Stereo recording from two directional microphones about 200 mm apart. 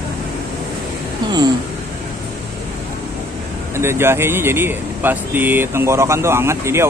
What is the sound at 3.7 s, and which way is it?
A man's voice, 10° right (ahead or behind).